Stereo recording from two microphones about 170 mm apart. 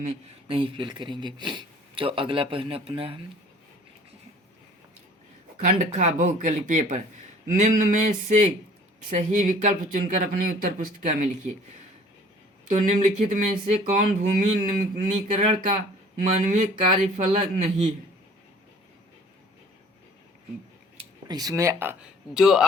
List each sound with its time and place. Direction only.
0.0 s speech: 30° right (ahead or behind)
5.5 s speech: 50° right (ahead or behind)
12.6 s speech: 45° right (ahead or behind)
21.0 s speech: 25° right (ahead or behind)
22.4 s speech: centre (ahead or behind)